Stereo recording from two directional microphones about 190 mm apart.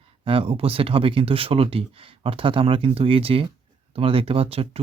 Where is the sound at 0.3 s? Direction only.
30° right (ahead or behind).